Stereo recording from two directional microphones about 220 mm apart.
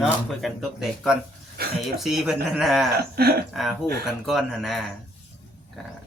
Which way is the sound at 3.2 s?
45° right (ahead or behind).